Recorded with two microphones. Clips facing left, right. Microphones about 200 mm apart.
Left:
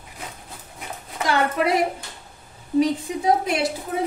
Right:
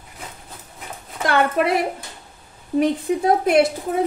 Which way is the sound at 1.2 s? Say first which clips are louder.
Right 3 dB; 55° right (ahead or behind).